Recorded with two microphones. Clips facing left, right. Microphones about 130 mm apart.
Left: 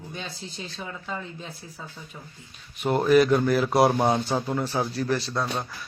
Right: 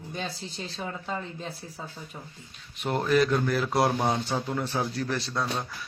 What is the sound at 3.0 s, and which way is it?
A man's voice, 10° left (ahead or behind).